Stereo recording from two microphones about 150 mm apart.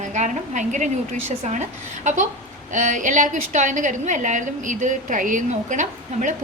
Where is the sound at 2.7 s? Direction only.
55° right (ahead or behind).